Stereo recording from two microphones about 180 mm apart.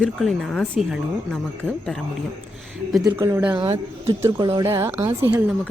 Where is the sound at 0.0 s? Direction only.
Centre (ahead or behind).